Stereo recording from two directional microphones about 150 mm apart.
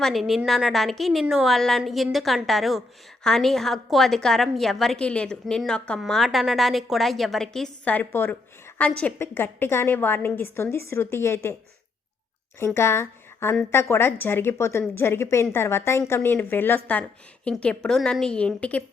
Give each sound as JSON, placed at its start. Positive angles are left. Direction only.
{"t": 0.0, "sound": "a woman's voice", "side_deg": 0}
{"t": 12.5, "sound": "a woman's voice", "side_deg": 15}